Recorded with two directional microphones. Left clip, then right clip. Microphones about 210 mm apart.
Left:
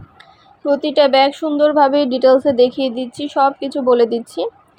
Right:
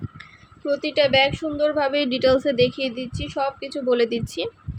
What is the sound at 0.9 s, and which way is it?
Speech, centre (ahead or behind).